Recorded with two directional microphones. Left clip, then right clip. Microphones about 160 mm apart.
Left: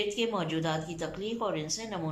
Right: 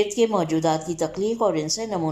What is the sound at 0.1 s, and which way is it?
A woman's voice, 35° right (ahead or behind).